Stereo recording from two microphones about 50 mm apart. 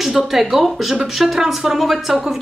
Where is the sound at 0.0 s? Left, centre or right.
Centre.